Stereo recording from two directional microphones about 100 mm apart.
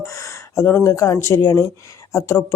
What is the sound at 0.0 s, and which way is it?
Speech, 30° left (ahead or behind).